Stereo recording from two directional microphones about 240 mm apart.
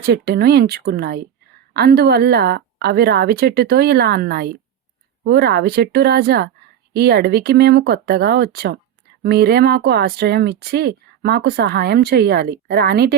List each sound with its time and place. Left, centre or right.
0.0 s speech: right